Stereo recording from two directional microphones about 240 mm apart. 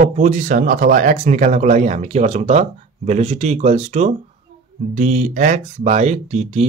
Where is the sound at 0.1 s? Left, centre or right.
Right.